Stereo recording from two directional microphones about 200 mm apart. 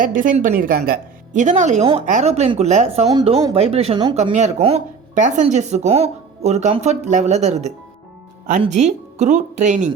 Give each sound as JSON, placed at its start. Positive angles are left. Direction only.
{"t": 0.0, "sound": "a woman's voice", "side_deg": -40}